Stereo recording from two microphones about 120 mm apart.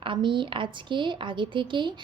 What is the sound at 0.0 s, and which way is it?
A woman's voice, 45° right (ahead or behind).